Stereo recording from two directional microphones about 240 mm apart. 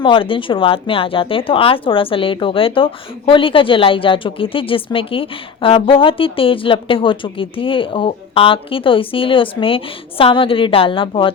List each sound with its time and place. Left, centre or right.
0.0 s a woman's voice: left